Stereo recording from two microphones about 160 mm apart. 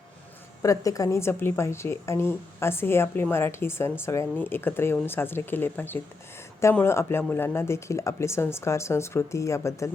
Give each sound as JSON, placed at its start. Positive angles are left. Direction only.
{"t": 0.6, "sound": "a woman's voice", "side_deg": 20}